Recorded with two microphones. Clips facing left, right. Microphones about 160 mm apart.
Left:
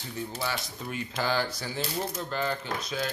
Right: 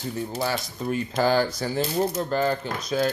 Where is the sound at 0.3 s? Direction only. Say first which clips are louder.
Right 6 dB; 45° right (ahead or behind).